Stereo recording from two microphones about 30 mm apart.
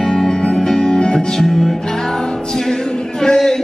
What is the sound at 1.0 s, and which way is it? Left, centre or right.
Music, left.